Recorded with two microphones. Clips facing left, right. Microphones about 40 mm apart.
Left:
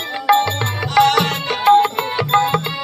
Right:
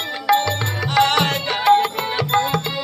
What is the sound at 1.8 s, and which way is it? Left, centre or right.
Music, centre.